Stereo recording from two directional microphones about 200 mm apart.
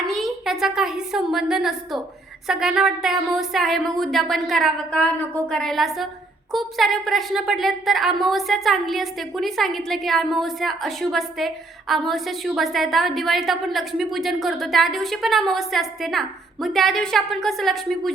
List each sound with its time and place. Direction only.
0.0 s a woman's voice: centre (ahead or behind)